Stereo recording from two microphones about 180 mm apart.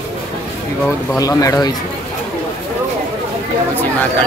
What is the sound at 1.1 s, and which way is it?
Speech, 20° left (ahead or behind).